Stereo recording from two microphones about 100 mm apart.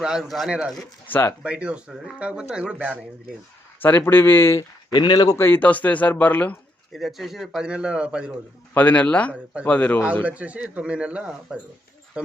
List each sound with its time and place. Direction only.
0.0 s speech: 5° right (ahead or behind)
1.0 s speech: 20° left (ahead or behind)
1.4 s speech: 10° right (ahead or behind)
3.8 s speech: 20° left (ahead or behind)
4.9 s speech: 45° left (ahead or behind)
5.4 s speech: 20° left (ahead or behind)
6.9 s speech: centre (ahead or behind)
8.7 s speech: 15° left (ahead or behind)
10.2 s speech: 15° right (ahead or behind)